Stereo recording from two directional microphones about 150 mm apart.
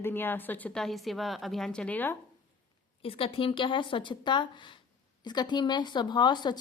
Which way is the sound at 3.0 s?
40° left (ahead or behind).